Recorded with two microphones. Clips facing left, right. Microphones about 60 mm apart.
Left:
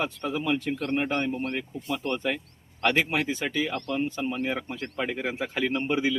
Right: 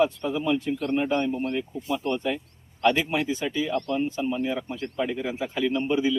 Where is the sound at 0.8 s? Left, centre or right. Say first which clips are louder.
Right 2 dB; left.